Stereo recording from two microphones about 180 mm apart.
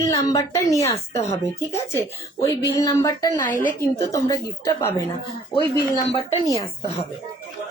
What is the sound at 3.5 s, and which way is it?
Speech, 45° left (ahead or behind).